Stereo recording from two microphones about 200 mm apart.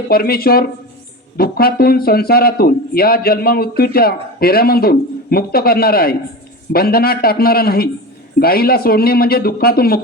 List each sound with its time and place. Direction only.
0.1 s speech: 50° left (ahead or behind)